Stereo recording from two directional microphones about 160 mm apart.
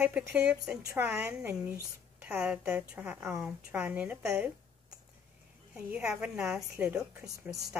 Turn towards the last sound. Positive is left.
turn(degrees=-10)  # may be behind; listen again after turning